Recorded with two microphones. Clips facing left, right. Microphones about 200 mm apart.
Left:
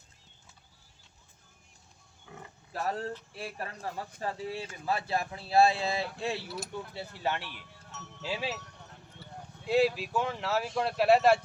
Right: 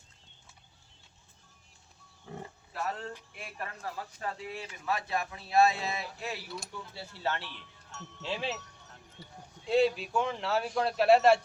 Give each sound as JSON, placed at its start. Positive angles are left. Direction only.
{"t": 2.3, "sound": "livestock", "side_deg": -35}
{"t": 2.7, "sound": "a man's voice", "side_deg": 40}
{"t": 7.9, "sound": "speech", "side_deg": 5}
{"t": 9.2, "sound": "a sound", "side_deg": -15}
{"t": 9.6, "sound": "speech", "side_deg": 5}